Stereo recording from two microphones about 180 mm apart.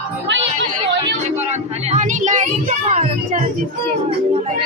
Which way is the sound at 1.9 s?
40° right (ahead or behind).